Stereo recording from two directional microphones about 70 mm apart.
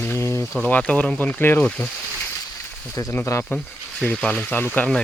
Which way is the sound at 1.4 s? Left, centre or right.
Left.